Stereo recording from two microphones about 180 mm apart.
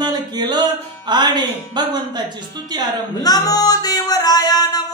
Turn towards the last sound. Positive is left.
turn(degrees=20)  # may be behind; listen again after turning